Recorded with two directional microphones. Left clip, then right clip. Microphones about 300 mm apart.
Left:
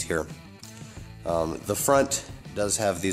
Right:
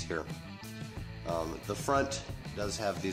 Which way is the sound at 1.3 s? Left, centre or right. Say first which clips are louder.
Left 9 dB; left.